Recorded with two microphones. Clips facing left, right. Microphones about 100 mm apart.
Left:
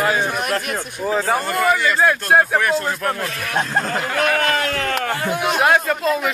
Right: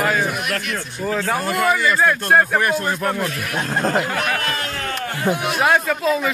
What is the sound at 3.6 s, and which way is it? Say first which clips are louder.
Speech: right 2 dB; 50° right (ahead or behind).